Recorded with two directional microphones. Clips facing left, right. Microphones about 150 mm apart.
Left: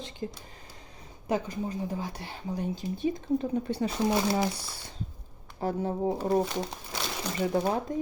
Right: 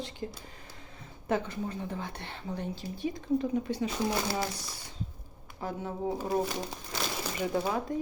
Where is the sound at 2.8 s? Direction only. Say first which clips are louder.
Left 6 dB; 20° left (ahead or behind).